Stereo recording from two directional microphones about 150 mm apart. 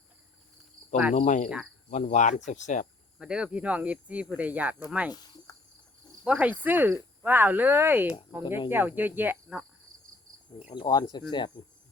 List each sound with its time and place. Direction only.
1.1 s speech: 55° left (ahead or behind)
3.2 s speech: 5° right (ahead or behind)
5.1 s cricket: 25° left (ahead or behind)
6.2 s speech: 10° right (ahead or behind)
10.8 s speech: 25° left (ahead or behind)